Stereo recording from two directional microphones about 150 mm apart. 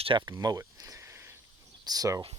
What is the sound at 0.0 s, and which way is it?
Speech, 30° right (ahead or behind).